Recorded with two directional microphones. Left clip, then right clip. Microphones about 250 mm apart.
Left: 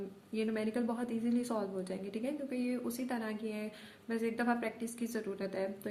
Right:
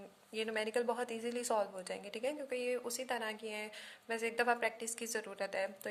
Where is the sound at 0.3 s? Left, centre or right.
Right.